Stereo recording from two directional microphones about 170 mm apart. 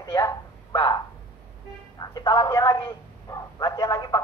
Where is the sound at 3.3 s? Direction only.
20° left (ahead or behind).